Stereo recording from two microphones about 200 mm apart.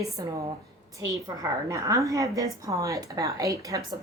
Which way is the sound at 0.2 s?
20° right (ahead or behind).